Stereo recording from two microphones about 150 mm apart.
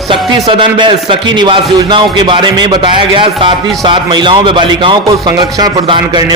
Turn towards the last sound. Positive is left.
turn(degrees=-30)  # may be behind; listen again after turning